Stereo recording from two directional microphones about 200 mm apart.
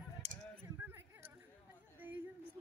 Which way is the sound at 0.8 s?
10° right (ahead or behind).